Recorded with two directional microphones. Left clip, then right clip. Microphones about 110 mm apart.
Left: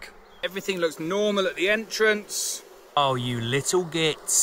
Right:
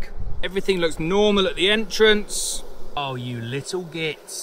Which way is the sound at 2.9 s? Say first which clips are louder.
Left 5 dB; 90° left.